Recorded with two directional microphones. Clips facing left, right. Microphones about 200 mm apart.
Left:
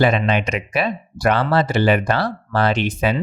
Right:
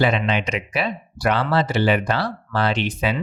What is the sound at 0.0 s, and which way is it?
Speech, 50° left (ahead or behind).